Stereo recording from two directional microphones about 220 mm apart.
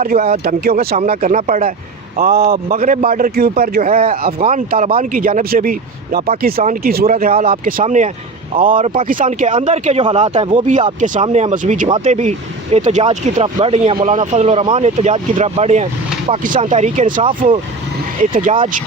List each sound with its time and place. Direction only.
0.0 s speech: 40° right (ahead or behind)